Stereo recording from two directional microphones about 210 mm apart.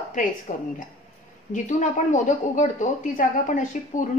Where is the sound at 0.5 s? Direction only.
35° left (ahead or behind).